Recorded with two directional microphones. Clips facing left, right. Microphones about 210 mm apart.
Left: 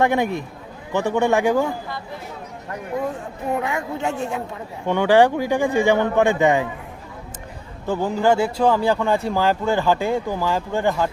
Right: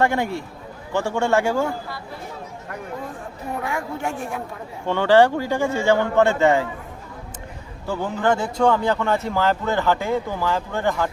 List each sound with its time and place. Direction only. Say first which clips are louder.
0.0 s speech: left 2 dB; 20° left (ahead or behind)
3.6 s a man's voice: left 2 dB; 20° left (ahead or behind)
7.9 s speech: left 3 dB; 10° left (ahead or behind)